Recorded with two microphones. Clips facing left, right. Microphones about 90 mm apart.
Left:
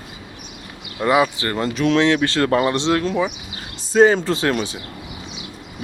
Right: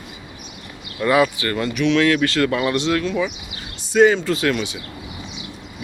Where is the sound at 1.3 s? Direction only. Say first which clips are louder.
Even; 30° left (ahead or behind).